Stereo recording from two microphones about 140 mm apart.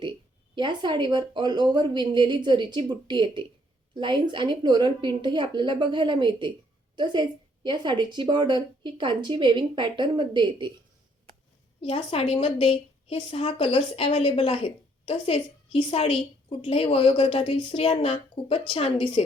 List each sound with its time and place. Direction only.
0.5 s a woman's voice: 35° right (ahead or behind)
11.8 s a woman's voice: 45° left (ahead or behind)